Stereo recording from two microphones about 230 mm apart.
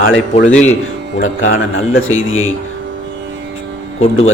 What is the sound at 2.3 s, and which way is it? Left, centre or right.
Speech, left.